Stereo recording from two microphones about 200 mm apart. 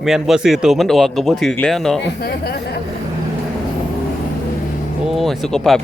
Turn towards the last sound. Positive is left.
turn(degrees=0)  # may be behind; listen again after turning